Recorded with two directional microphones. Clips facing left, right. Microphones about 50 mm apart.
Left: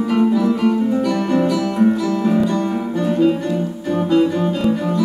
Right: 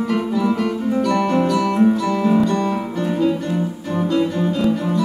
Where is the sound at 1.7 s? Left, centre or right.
Right.